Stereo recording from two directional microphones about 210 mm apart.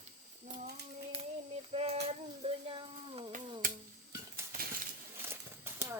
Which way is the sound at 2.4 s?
25° right (ahead or behind).